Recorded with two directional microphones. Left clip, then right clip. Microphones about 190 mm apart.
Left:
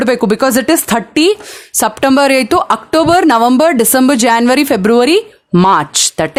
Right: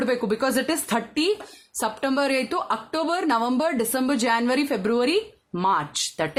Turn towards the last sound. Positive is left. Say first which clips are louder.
# left 13 dB
turn(degrees=50)  # may be behind; listen again after turning